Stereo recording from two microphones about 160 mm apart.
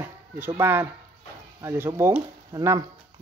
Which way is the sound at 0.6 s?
15° right (ahead or behind).